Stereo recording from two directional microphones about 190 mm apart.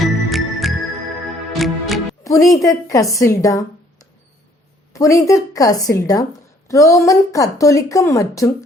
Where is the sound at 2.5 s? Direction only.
15° left (ahead or behind).